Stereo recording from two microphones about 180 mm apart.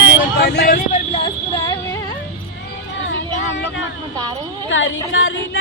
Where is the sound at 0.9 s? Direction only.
30° left (ahead or behind).